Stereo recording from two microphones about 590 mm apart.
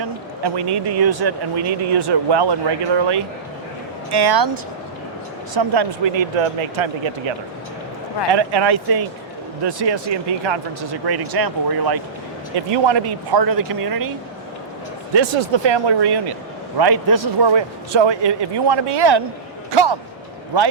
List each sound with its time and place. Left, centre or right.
0.0 s speech: right
4.1 s speech: right
15.1 s speech: right
19.7 s a sound: right